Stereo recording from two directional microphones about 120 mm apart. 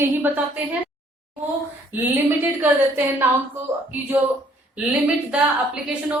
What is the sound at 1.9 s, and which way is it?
A woman's voice, 15° right (ahead or behind).